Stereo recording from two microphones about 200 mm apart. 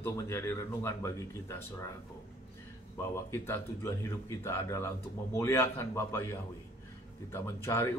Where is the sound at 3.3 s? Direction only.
10° left (ahead or behind).